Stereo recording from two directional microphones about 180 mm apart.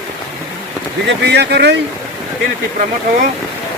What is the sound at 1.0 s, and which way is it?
Speech, 70° right (ahead or behind).